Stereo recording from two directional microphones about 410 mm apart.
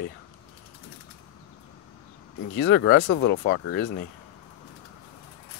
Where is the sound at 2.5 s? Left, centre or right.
Left.